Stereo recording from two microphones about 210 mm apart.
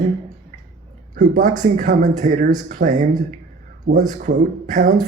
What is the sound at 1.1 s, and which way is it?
A man's voice, 35° right (ahead or behind).